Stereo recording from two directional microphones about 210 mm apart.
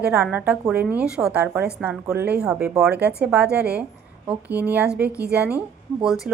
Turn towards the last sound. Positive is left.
turn(degrees=0)  # may be behind; listen again after turning